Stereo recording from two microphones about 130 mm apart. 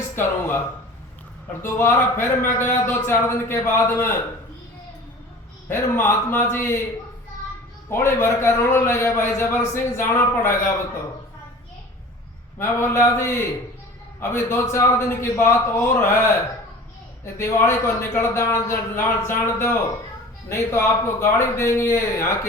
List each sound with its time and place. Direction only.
0.2 s a man's voice: 15° left (ahead or behind)
1.6 s a man's voice: 15° left (ahead or behind)
5.6 s a man's voice: 15° left (ahead or behind)
7.9 s a man's voice: 20° left (ahead or behind)
12.5 s a man's voice: 20° left (ahead or behind)
17.3 s a man's voice: 20° left (ahead or behind)